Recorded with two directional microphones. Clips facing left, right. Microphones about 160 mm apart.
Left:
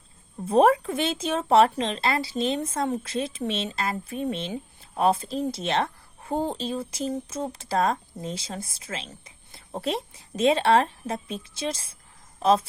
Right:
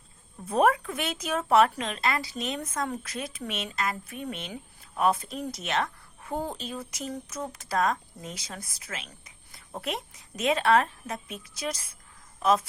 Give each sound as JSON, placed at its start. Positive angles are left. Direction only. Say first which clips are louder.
{"t": 0.4, "sound": "a woman's voice", "louder": "left 5 dB", "side_deg": 30}